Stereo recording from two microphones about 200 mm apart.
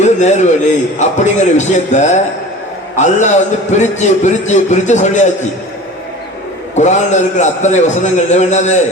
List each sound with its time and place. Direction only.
0.0 s a man's voice: 35° left (ahead or behind)
6.7 s a man's voice: 35° left (ahead or behind)